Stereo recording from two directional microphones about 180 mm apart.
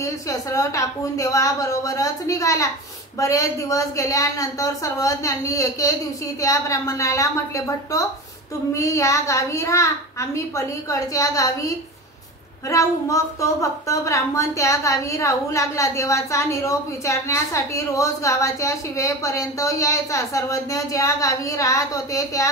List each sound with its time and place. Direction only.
0.0 s a woman's voice: 15° left (ahead or behind)